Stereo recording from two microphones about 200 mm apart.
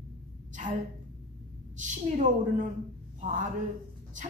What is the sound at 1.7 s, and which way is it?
Speech, 40° right (ahead or behind).